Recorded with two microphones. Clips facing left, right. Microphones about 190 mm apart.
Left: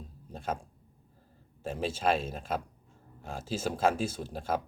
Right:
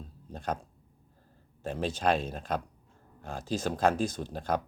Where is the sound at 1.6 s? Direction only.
5° left (ahead or behind).